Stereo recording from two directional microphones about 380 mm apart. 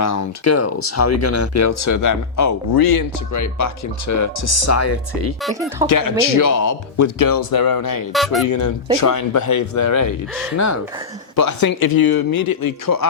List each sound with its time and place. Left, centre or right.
0.0 s speech: left
5.4 s speech: centre
5.9 s speech: left
8.1 s speech: centre
8.4 s speech: left
11.3 s speech: left